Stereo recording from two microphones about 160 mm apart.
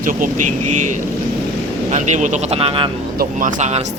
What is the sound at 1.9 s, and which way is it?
Speech, 50° right (ahead or behind).